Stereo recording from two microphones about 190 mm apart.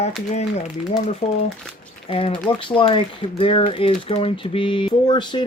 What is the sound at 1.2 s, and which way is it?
Speech, 30° left (ahead or behind).